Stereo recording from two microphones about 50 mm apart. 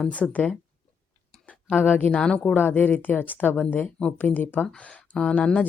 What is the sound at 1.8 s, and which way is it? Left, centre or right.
Speech, left.